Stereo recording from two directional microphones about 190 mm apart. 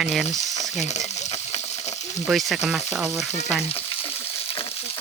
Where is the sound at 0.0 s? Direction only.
Centre (ahead or behind).